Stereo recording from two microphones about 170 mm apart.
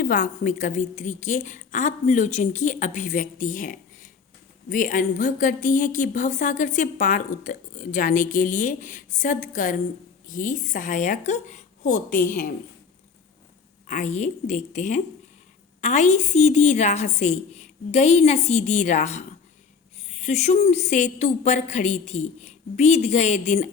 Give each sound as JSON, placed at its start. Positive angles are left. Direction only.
{"t": 0.0, "sound": "a woman's voice", "side_deg": 50}
{"t": 13.8, "sound": "a woman's voice", "side_deg": 45}